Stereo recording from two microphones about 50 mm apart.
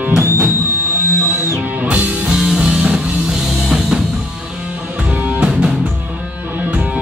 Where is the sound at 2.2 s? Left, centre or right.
Centre.